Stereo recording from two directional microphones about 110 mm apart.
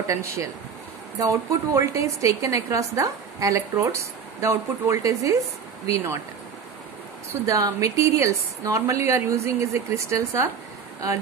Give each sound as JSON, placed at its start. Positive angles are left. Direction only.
{"t": 0.0, "sound": "a woman's voice", "side_deg": -30}
{"t": 7.4, "sound": "a woman's voice", "side_deg": -30}